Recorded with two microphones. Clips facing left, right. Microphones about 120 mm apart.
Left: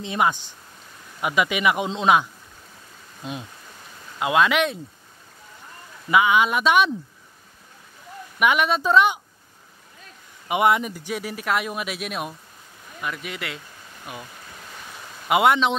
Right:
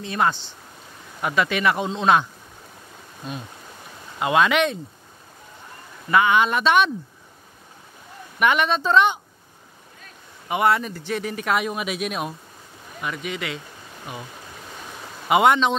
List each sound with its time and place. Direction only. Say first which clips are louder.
0.0 s speech: even; 15° left (ahead or behind)
3.2 s speech: even; 20° left (ahead or behind)
4.2 s speech: right 1 dB; centre (ahead or behind)
6.0 s speech: even; 5° left (ahead or behind)
8.4 s speech: even; 5° left (ahead or behind)
10.5 s speech: left 1 dB; 15° left (ahead or behind); by 13.6 s centre (ahead or behind)
15.2 s speech: right 1 dB; centre (ahead or behind)